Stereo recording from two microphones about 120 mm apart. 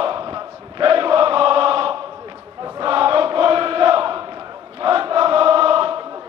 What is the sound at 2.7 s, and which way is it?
Chant, 50° right (ahead or behind).